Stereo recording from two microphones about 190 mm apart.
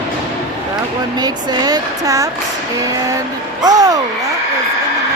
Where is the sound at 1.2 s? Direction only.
20° right (ahead or behind).